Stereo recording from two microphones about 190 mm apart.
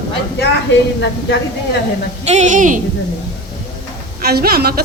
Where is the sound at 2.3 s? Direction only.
40° right (ahead or behind).